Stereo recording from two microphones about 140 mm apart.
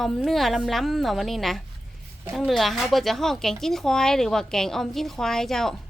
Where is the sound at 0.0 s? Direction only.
Centre (ahead or behind).